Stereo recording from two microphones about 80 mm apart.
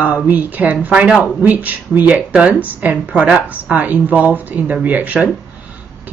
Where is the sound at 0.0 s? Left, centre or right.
Centre.